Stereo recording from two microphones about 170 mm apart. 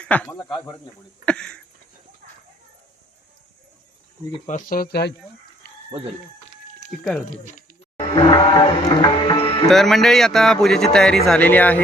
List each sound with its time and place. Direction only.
0.0 s speech: 10° left (ahead or behind)
2.2 s a sound: 55° right (ahead or behind)
4.4 s speech: 50° left (ahead or behind); by 5.1 s 70° left (ahead or behind)
7.3 s a sound: 50° left (ahead or behind)
8.1 s music: 25° left (ahead or behind)
9.6 s speech: centre (ahead or behind)